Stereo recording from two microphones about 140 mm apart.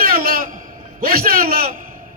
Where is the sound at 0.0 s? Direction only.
90° right.